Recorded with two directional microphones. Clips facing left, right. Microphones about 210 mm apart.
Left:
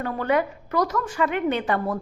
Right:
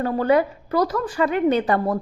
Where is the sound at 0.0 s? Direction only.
35° right (ahead or behind).